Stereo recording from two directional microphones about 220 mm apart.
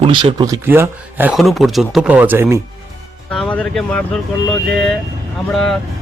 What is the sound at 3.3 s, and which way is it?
Speech, 5° left (ahead or behind).